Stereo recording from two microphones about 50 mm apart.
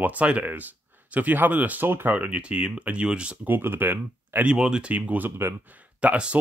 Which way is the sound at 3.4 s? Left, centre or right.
Right.